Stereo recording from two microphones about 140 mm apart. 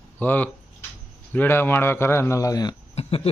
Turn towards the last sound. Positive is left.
turn(degrees=45)  # may be behind; listen again after turning